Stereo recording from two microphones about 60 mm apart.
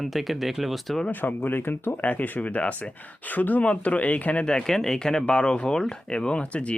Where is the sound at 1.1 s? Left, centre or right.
Left.